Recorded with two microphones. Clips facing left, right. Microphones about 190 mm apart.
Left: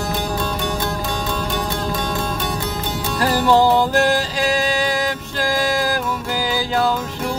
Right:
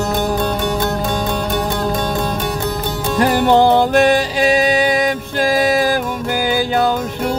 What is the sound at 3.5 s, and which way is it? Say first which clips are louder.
Music: right 3 dB; 65° right (ahead or behind).